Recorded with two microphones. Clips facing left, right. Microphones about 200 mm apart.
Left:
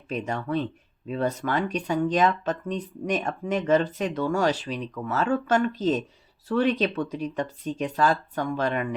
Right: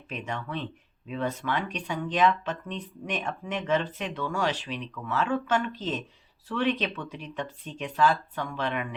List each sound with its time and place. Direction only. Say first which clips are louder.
0.1 s speech: left 7 dB; 40° left (ahead or behind)